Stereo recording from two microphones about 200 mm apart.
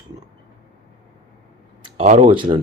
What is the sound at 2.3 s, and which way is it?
Speech, 25° right (ahead or behind).